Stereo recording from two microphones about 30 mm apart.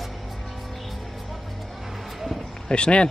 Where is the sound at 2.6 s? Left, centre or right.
Left.